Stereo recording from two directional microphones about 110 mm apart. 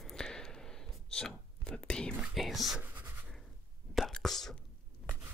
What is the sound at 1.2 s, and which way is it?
Whispering, 5° left (ahead or behind).